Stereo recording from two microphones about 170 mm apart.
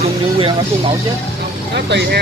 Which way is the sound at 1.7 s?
80° right.